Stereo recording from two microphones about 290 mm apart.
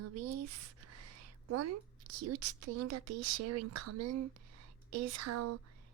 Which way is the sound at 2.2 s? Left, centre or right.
Right.